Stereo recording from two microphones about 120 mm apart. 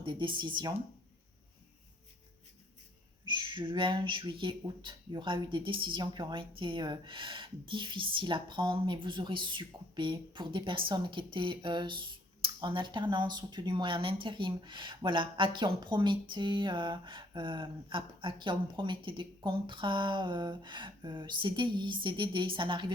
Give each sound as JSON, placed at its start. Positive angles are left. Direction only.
{"t": 0.0, "sound": "speech", "side_deg": -45}
{"t": 3.2, "sound": "speech", "side_deg": -40}